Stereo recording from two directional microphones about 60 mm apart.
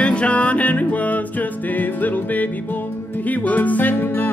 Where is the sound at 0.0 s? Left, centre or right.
Left.